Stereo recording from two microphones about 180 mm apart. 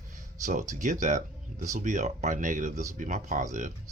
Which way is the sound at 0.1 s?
45° right (ahead or behind).